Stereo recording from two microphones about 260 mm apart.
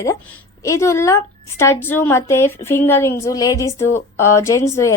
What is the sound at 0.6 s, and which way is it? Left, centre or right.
A woman's voice, centre.